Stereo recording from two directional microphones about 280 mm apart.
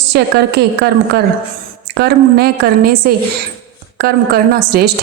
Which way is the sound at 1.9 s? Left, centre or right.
Right.